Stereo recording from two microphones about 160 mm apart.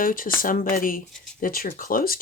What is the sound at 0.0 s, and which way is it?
Speech, 60° left (ahead or behind).